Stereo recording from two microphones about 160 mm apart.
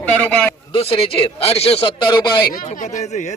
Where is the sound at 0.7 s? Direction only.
35° left (ahead or behind).